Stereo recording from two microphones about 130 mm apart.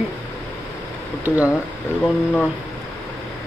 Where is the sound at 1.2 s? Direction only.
15° right (ahead or behind).